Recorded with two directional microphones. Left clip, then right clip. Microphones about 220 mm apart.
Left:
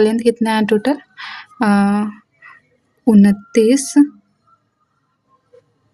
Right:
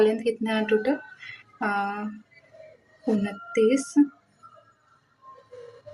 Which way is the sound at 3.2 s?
50° left (ahead or behind).